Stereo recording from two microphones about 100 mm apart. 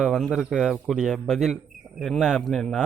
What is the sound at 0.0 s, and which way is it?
A man's voice, 5° right (ahead or behind).